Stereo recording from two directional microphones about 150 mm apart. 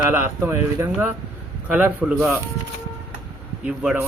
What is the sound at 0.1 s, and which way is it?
Speech, 15° right (ahead or behind).